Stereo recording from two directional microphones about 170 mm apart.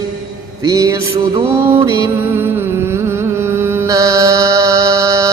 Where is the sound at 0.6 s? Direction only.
20° right (ahead or behind).